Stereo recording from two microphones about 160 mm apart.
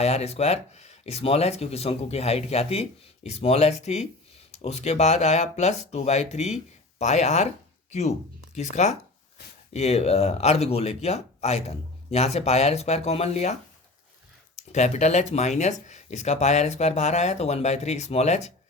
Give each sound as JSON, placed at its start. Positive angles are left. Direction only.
{"t": 0.0, "sound": "speech", "side_deg": 40}
{"t": 9.4, "sound": "a sound", "side_deg": 80}
{"t": 9.7, "sound": "speech", "side_deg": 40}